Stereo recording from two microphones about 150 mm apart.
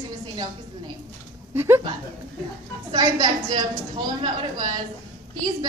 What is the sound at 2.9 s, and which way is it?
A woman's voice, 25° right (ahead or behind).